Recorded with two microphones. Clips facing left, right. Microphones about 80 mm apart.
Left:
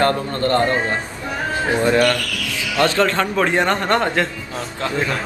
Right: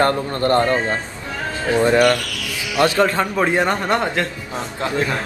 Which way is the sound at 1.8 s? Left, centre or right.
Right.